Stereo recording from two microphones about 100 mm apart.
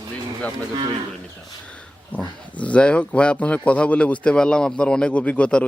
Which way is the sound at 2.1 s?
15° left (ahead or behind).